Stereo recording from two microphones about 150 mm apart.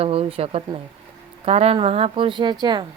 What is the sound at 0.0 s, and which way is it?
Speech, 40° right (ahead or behind).